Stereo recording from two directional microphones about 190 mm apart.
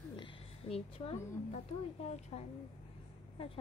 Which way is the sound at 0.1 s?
25° left (ahead or behind).